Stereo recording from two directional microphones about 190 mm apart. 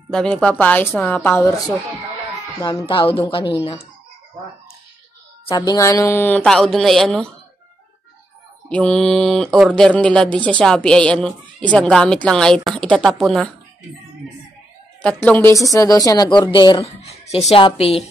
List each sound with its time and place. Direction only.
0.1 s speech: 5° left (ahead or behind)
2.6 s a woman's voice: 25° left (ahead or behind)
5.5 s speech: 25° left (ahead or behind); by 7.2 s centre (ahead or behind)
8.6 s speech: 5° left (ahead or behind)
15.0 s a woman's voice: 10° left (ahead or behind); by 17.9 s 30° left (ahead or behind)